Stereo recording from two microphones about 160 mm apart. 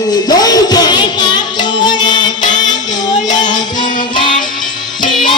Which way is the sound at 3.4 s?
50° left (ahead or behind).